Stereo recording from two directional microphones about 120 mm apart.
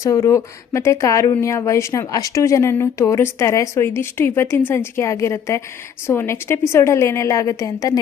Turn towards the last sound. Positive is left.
turn(degrees=30)  # may be behind; listen again after turning